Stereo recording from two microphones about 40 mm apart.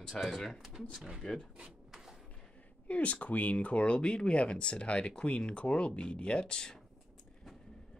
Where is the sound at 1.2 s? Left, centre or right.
Centre.